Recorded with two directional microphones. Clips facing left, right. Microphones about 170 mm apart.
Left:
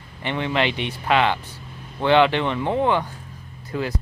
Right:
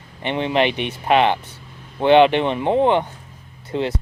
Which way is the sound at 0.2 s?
20° right (ahead or behind).